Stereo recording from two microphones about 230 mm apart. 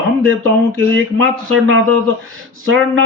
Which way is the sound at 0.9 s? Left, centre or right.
Right.